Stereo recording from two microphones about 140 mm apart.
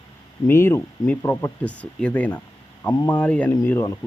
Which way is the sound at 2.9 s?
30° left (ahead or behind).